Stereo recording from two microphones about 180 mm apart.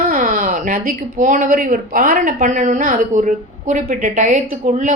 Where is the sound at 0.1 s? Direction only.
50° right (ahead or behind).